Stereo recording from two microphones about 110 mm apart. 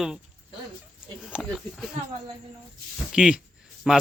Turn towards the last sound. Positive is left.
turn(degrees=-5)  # may be behind; listen again after turning